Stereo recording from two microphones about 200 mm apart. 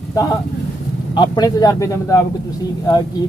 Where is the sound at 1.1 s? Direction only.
20° left (ahead or behind).